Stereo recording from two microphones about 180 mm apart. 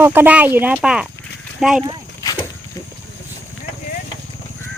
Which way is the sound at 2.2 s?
20° left (ahead or behind).